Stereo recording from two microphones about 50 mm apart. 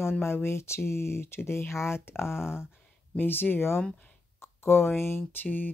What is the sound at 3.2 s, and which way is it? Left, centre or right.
Speech, left.